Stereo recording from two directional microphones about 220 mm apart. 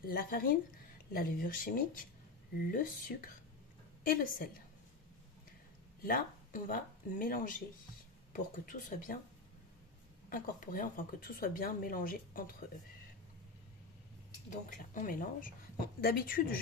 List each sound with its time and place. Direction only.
0.0 s a woman's voice: 40° left (ahead or behind)
6.0 s speech: 40° left (ahead or behind)
10.3 s speech: 40° left (ahead or behind)
14.7 s a woman's voice: 35° left (ahead or behind)